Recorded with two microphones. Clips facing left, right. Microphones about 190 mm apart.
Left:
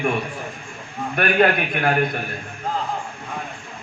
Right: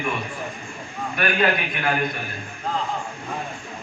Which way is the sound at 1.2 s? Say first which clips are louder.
Left 4 dB; 55° left (ahead or behind).